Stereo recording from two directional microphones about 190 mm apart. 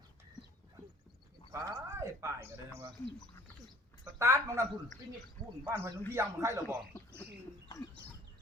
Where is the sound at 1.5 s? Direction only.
15° right (ahead or behind).